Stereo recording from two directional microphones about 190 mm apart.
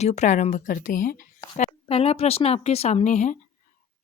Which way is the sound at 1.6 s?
30° left (ahead or behind).